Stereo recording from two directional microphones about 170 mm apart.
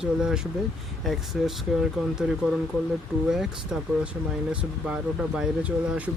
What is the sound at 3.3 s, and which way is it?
Speech, 5° right (ahead or behind).